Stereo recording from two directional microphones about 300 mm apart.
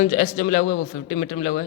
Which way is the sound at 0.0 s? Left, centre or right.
Left.